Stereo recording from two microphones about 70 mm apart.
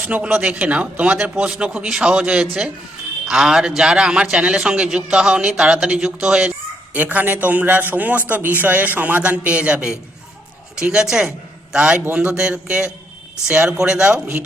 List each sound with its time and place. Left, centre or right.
0.0 s a man's voice: right
6.9 s a man's voice: right